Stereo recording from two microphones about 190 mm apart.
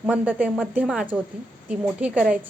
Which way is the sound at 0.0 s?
10° right (ahead or behind).